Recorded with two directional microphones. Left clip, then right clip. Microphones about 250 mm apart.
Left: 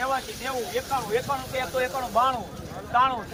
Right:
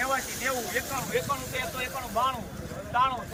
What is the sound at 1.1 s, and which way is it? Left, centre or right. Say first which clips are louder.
Speech: left 3 dB; centre.